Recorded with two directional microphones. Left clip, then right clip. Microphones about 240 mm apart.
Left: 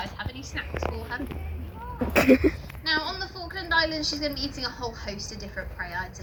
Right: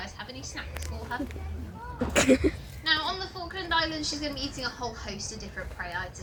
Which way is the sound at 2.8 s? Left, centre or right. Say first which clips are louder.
Even; left.